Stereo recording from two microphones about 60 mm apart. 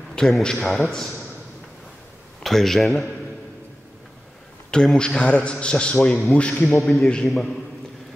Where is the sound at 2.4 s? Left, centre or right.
Centre.